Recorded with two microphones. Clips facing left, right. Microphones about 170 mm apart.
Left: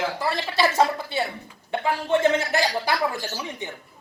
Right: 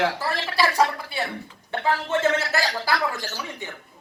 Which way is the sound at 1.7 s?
15° left (ahead or behind).